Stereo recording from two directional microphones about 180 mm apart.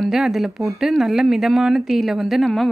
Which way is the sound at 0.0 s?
Centre (ahead or behind).